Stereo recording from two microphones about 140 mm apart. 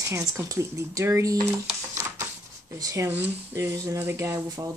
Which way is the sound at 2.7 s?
25° right (ahead or behind).